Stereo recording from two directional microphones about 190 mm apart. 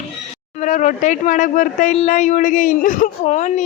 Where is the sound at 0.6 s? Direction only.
40° left (ahead or behind).